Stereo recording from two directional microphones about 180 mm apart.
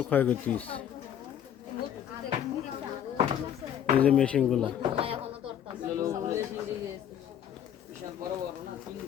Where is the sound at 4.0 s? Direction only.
5° left (ahead or behind).